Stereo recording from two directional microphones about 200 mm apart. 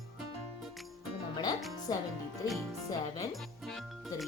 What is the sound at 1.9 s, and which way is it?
Speech, 20° left (ahead or behind).